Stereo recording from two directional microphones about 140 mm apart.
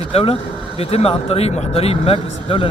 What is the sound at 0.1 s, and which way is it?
A man's voice, 45° left (ahead or behind).